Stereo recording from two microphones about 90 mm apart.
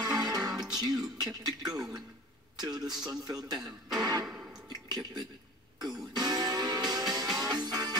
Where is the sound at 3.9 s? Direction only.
45° right (ahead or behind).